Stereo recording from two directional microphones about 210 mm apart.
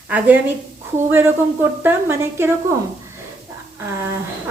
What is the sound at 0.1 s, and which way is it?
A woman's voice, 10° right (ahead or behind).